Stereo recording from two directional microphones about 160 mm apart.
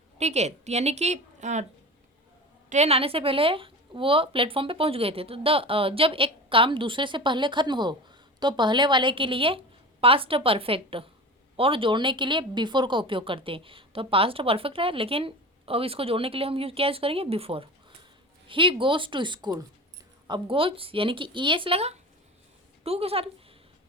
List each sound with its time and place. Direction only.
0.2 s a woman's voice: 45° right (ahead or behind)
2.6 s speech: 45° right (ahead or behind)